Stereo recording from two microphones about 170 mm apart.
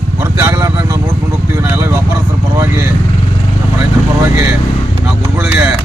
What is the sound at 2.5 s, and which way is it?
Speech, 20° right (ahead or behind).